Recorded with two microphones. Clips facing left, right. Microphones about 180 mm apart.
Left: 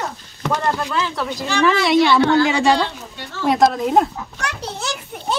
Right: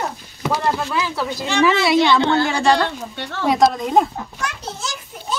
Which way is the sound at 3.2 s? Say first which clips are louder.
Right 1 dB; 65° right (ahead or behind).